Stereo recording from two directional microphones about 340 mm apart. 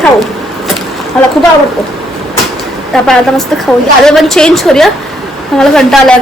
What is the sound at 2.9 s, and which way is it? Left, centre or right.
A woman's voice, centre.